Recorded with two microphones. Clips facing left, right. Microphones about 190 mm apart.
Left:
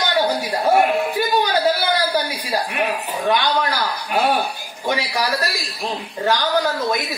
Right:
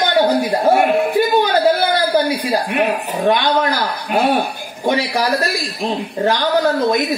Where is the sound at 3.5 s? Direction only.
55° right (ahead or behind).